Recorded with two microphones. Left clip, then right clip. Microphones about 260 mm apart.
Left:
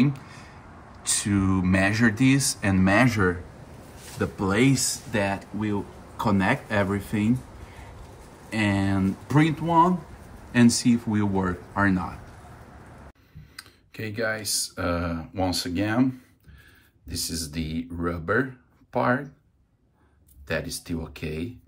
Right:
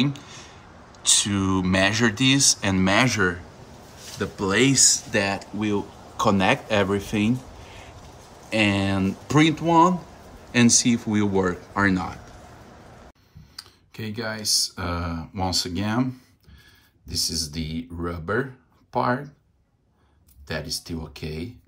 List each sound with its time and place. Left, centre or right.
1.0 s speech: centre
8.5 s speech: centre
13.6 s speech: centre
20.4 s speech: centre